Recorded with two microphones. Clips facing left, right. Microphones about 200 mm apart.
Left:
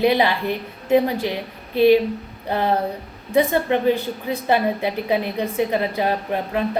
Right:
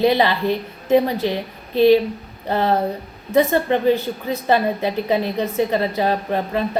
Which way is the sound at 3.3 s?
15° left (ahead or behind).